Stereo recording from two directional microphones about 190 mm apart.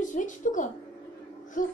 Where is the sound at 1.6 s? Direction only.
45° left (ahead or behind).